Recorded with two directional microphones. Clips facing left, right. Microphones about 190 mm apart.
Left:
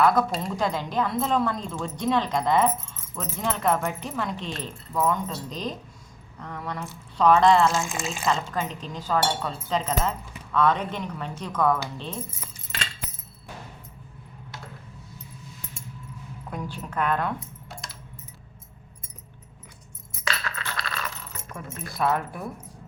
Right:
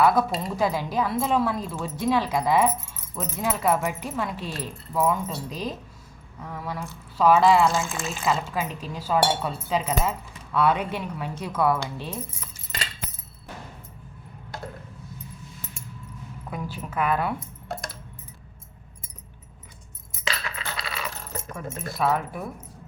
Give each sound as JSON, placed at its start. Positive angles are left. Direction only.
{"t": 0.0, "sound": "speech", "side_deg": -5}
{"t": 16.5, "sound": "a woman's voice", "side_deg": -5}
{"t": 17.7, "sound": "keys jangling", "side_deg": -60}
{"t": 20.2, "sound": "coin", "side_deg": -20}
{"t": 21.5, "sound": "speech", "side_deg": 0}